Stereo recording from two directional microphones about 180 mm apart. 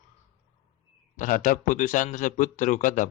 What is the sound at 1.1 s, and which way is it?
Speech, 45° left (ahead or behind).